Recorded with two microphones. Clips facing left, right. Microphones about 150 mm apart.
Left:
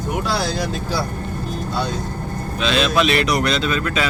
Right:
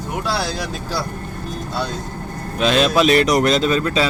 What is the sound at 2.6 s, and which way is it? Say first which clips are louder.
A man's voice: right 3 dB; 45° right (ahead or behind).